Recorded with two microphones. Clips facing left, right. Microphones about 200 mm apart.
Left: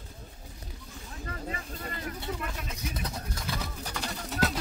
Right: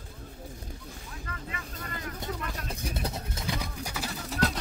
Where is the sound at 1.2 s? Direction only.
35° left (ahead or behind).